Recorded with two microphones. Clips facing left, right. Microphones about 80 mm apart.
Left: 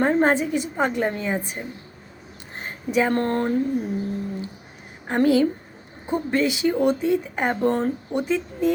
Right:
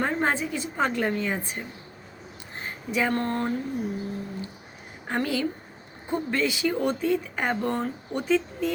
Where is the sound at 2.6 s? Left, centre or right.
Left.